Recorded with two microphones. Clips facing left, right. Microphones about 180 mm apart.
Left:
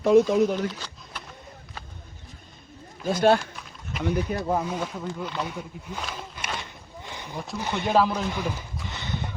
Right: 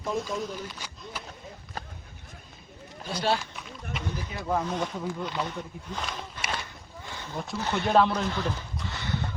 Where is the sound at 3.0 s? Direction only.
50° left (ahead or behind).